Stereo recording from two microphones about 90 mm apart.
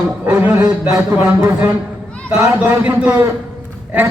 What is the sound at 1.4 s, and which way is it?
A man's voice, 30° right (ahead or behind).